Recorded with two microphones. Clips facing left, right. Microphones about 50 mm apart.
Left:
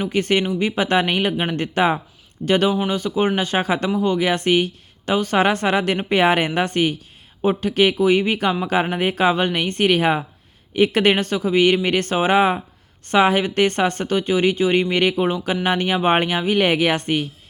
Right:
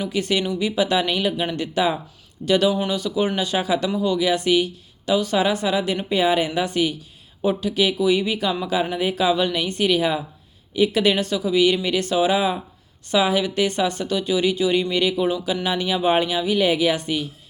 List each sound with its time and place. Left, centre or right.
0.0 s speech: left